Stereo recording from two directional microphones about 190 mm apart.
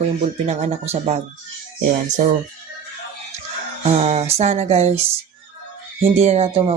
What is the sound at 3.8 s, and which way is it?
Speech, 35° right (ahead or behind).